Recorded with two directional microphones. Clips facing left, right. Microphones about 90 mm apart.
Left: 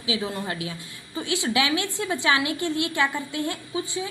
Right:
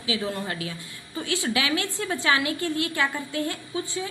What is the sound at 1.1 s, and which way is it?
A woman's voice, 20° left (ahead or behind).